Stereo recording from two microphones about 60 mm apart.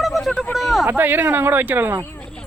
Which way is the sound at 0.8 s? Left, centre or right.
Right.